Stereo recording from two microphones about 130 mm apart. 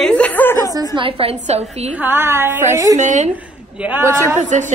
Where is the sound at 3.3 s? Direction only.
15° right (ahead or behind).